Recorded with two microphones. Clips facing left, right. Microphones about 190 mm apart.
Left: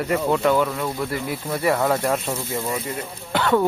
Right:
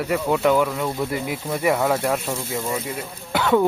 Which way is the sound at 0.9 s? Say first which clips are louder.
Right 1 dB; 20° right (ahead or behind).